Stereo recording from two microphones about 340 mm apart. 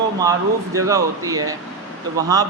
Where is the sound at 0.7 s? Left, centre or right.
Centre.